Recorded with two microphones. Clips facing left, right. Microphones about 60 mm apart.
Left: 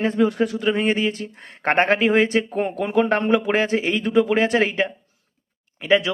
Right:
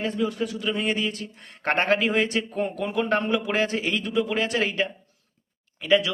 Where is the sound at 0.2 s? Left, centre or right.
Left.